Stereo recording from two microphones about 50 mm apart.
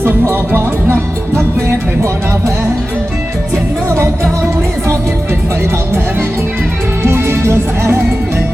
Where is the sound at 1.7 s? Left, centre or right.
Right.